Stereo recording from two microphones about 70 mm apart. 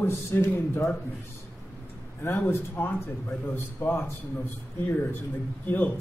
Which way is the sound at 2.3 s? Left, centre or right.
Left.